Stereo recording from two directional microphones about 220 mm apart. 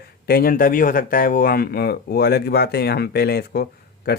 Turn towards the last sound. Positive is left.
turn(degrees=45)  # may be behind; listen again after turning